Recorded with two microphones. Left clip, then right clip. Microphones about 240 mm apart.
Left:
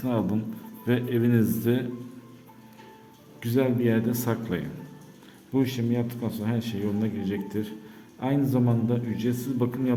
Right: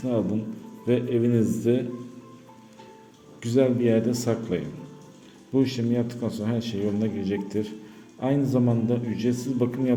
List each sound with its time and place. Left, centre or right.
0.0 s a man's voice: centre
3.4 s a man's voice: centre